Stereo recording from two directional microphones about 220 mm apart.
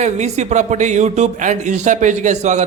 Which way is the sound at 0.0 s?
30° right (ahead or behind).